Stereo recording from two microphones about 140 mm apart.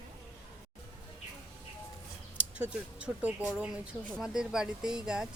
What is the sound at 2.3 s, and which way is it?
Speech, 10° right (ahead or behind).